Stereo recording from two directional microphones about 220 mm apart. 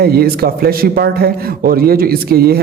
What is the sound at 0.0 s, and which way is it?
A man's voice, 45° right (ahead or behind).